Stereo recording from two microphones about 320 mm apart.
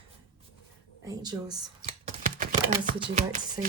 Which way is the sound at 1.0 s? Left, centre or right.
Centre.